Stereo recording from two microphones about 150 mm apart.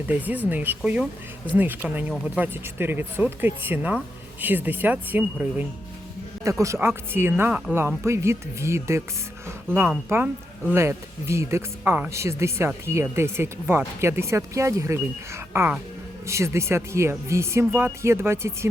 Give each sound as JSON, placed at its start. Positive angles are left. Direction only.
{"t": 0.1, "sound": "speech", "side_deg": -10}